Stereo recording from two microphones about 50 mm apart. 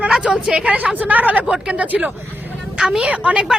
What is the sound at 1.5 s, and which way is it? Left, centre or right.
Speech, right.